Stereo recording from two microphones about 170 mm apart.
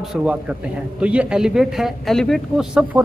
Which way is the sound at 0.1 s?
5° right (ahead or behind).